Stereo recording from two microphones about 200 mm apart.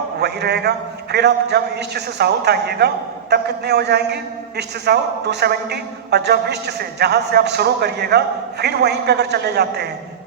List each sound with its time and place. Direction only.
0.2 s a man's voice: 55° right (ahead or behind)